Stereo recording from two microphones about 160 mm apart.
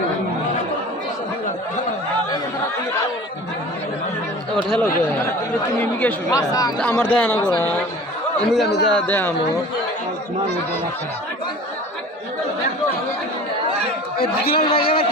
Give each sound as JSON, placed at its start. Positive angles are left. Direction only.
{"t": 4.5, "sound": "a man's voice", "side_deg": 5}
{"t": 6.5, "sound": "speech", "side_deg": 25}
{"t": 6.7, "sound": "a man's voice", "side_deg": 10}
{"t": 14.2, "sound": "a man's voice", "side_deg": 70}
{"t": 14.7, "sound": "a man's voice", "side_deg": 35}